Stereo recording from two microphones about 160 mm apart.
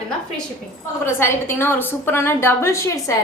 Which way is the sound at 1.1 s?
15° left (ahead or behind).